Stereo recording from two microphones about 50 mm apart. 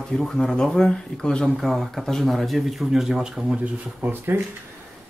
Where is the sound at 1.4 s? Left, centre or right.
Centre.